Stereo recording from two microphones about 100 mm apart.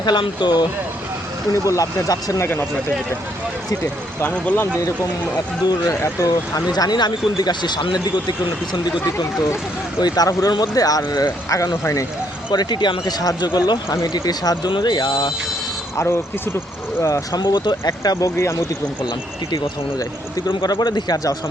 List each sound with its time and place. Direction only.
0.0 s speech: 50° left (ahead or behind)
1.6 s speech: 35° left (ahead or behind)
4.2 s speech: 20° left (ahead or behind)
5.6 s speech: 35° left (ahead or behind)
6.7 s speech: 45° left (ahead or behind); by 12.0 s 25° left (ahead or behind)
12.5 s speech: 50° left (ahead or behind)
16.0 s speech: 25° left (ahead or behind)
20.5 s speech: 50° left (ahead or behind)